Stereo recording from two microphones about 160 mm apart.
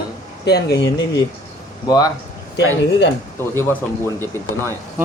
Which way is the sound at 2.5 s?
90° left.